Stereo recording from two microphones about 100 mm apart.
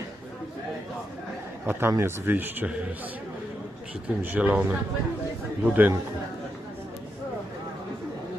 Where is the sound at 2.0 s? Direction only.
25° right (ahead or behind).